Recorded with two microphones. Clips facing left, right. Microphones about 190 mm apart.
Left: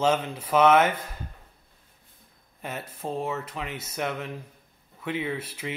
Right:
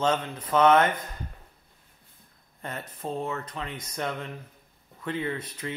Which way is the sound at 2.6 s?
5° left (ahead or behind).